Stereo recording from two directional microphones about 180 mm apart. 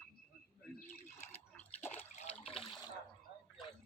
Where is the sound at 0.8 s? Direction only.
40° left (ahead or behind).